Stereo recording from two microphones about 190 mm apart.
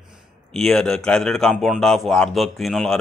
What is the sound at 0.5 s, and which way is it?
A man's voice, centre (ahead or behind).